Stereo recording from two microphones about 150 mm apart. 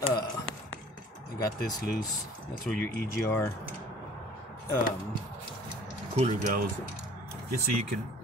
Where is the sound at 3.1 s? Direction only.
20° left (ahead or behind).